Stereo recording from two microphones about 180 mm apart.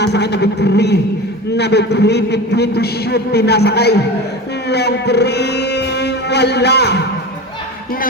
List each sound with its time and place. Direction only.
0.0 s a man's voice: 70° left (ahead or behind)
4.7 s music: 65° left (ahead or behind)